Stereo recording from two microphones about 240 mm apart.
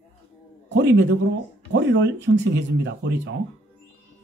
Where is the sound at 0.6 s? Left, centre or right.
Right.